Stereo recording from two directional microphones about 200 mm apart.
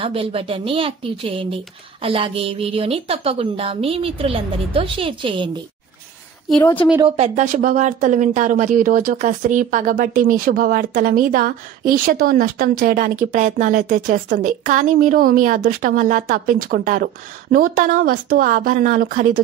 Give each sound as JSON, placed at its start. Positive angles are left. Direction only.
{"t": 0.0, "sound": "speech", "side_deg": -25}
{"t": 7.2, "sound": "a woman's voice", "side_deg": -35}